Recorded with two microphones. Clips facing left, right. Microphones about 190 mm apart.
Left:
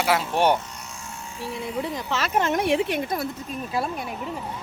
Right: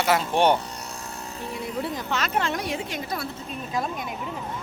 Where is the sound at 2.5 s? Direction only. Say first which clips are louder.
Left 7 dB; 60° left (ahead or behind).